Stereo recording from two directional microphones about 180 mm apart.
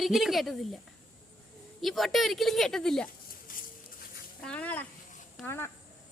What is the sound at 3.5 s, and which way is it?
Patter, 50° left (ahead or behind).